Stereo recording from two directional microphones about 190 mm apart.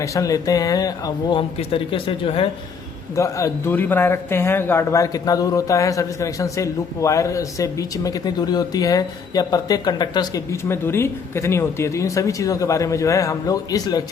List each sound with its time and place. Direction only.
0.0 s speech: 15° left (ahead or behind)
3.2 s speech: 15° left (ahead or behind)